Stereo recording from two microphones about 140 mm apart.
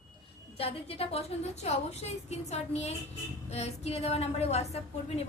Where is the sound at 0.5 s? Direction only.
45° left (ahead or behind).